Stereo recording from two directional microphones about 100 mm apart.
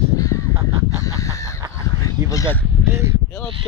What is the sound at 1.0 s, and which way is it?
Chicken, 30° left (ahead or behind).